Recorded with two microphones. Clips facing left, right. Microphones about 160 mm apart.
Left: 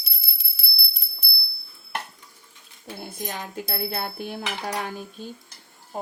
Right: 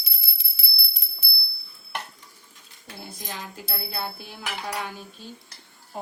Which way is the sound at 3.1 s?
55° left (ahead or behind).